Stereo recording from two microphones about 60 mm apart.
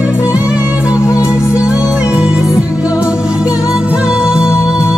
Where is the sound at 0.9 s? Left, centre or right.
Centre.